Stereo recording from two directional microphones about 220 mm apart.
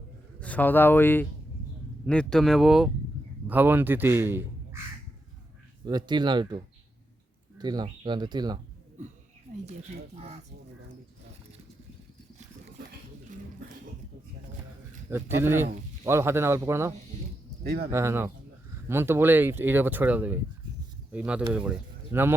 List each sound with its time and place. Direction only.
0.3 s a man's voice: 5° left (ahead or behind); by 4.8 s 10° right (ahead or behind)
5.8 s speech: 20° right (ahead or behind)
7.6 s speech: 20° right (ahead or behind)
15.1 s speech: 10° right (ahead or behind)
17.6 s speech: 45° right (ahead or behind)
17.9 s speech: 10° right (ahead or behind)